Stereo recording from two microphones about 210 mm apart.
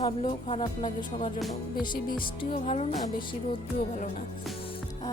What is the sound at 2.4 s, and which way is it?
Music, 30° left (ahead or behind).